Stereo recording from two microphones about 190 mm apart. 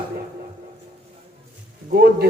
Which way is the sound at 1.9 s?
55° right (ahead or behind).